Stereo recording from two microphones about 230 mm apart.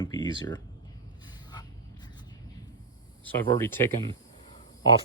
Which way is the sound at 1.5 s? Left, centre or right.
Centre.